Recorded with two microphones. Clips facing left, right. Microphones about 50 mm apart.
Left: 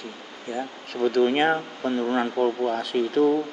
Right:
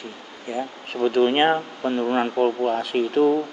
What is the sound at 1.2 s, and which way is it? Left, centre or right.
Speech, right.